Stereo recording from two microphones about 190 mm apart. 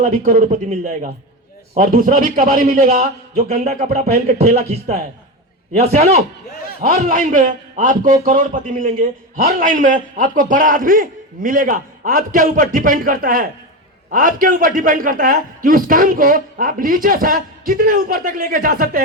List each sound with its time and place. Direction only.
0.0 s a man's voice: 45° right (ahead or behind)
4.1 s speech: 35° right (ahead or behind)
6.8 s a man's voice: 45° right (ahead or behind)